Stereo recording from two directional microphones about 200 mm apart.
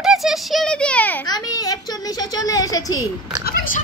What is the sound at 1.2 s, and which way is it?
Speech, 20° left (ahead or behind).